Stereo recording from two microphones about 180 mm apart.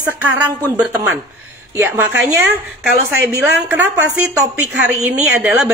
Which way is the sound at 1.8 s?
15° right (ahead or behind).